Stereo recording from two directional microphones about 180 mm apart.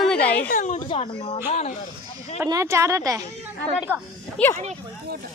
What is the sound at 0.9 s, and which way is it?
Speech, 30° left (ahead or behind).